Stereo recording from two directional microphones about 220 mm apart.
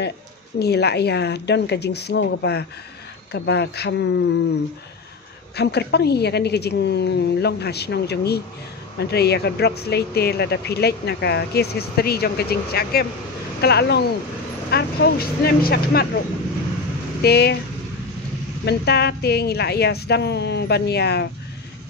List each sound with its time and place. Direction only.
0.6 s speech: 50° left (ahead or behind)
5.6 s speech: 50° left (ahead or behind)
17.2 s speech: 45° left (ahead or behind)
18.7 s speech: 50° left (ahead or behind)